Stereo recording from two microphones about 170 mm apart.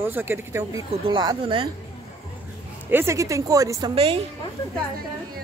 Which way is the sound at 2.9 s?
15° right (ahead or behind).